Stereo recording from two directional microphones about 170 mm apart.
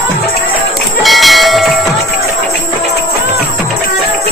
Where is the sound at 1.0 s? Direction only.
Centre (ahead or behind).